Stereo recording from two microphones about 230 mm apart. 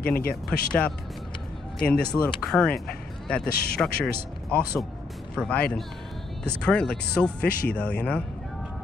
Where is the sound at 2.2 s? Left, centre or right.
Centre.